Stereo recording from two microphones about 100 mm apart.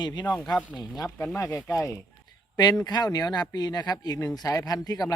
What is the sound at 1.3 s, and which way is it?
Speech, 30° left (ahead or behind).